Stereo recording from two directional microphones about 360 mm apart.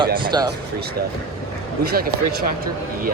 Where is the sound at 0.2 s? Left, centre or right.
Centre.